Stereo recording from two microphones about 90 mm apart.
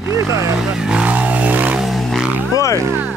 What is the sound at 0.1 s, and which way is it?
Speech, 35° right (ahead or behind).